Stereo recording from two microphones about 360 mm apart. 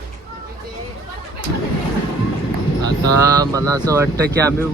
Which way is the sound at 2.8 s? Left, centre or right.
Centre.